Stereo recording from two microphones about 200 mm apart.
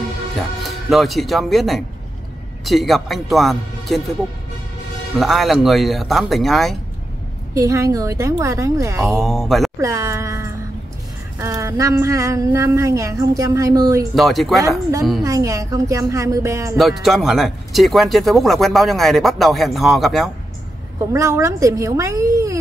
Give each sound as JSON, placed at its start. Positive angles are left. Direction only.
{"t": 0.4, "sound": "speech", "side_deg": 0}
{"t": 5.2, "sound": "speech", "side_deg": 0}
{"t": 7.5, "sound": "speech", "side_deg": -15}
{"t": 9.2, "sound": "speech", "side_deg": 0}
{"t": 9.8, "sound": "speech", "side_deg": -15}
{"t": 14.1, "sound": "speech", "side_deg": 0}
{"t": 15.2, "sound": "speech", "side_deg": -15}
{"t": 16.7, "sound": "speech", "side_deg": 0}
{"t": 21.1, "sound": "speech", "side_deg": -15}